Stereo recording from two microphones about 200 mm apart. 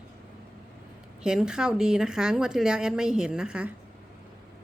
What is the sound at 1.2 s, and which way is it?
Speech, 5° right (ahead or behind).